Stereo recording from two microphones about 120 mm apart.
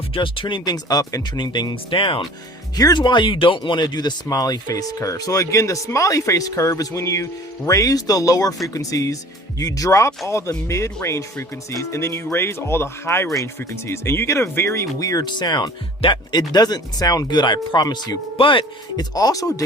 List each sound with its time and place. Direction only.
0.1 s speech: 45° left (ahead or behind); by 19.6 s 30° left (ahead or behind)